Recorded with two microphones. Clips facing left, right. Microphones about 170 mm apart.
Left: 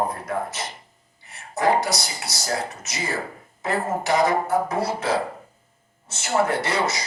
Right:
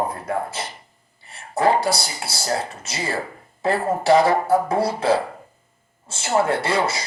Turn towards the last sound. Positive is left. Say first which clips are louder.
# right 2 dB
turn(degrees=-30)  # may be behind; listen again after turning